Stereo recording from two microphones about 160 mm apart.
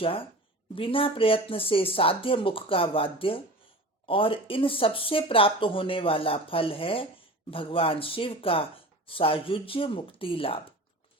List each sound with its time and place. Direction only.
0.0 s speech: 35° left (ahead or behind)